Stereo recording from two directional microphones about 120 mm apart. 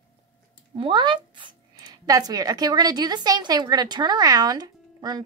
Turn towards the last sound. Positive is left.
turn(degrees=-35)  # may be behind; listen again after turning